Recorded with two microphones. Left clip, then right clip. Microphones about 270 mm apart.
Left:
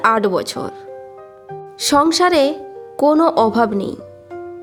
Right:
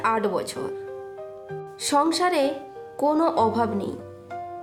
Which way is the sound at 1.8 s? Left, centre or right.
Left.